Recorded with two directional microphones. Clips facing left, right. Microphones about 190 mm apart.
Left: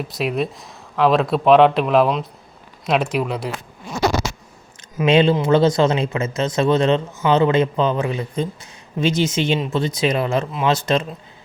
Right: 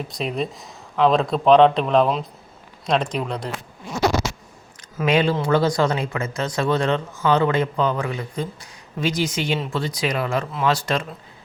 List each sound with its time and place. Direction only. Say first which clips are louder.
0.1 s speech: left 5 dB; 5° left (ahead or behind)
4.9 s speech: left 4 dB; 25° left (ahead or behind)